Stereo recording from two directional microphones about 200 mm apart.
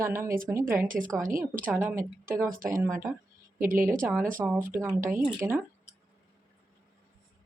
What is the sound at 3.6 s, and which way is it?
Speech, 45° right (ahead or behind).